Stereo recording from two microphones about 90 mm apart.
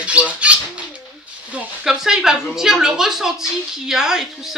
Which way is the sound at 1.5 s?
15° right (ahead or behind).